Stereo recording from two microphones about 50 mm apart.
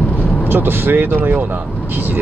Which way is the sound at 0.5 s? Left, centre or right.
Right.